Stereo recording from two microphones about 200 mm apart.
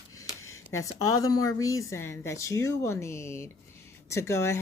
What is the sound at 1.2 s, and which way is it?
Speech, 15° left (ahead or behind).